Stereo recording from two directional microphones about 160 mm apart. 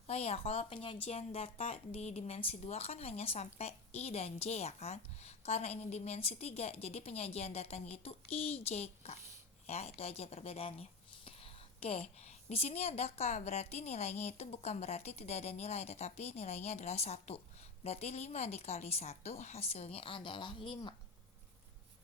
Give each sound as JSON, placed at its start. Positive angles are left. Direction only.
{"t": 0.1, "sound": "a woman's voice", "side_deg": 40}
{"t": 11.3, "sound": "a sound", "side_deg": 35}
{"t": 12.2, "sound": "a woman's voice", "side_deg": 40}